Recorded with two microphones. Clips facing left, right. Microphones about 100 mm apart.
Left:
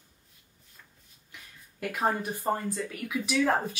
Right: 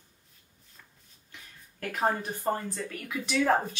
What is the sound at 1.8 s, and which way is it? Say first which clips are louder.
Speech: even; 5° left (ahead or behind).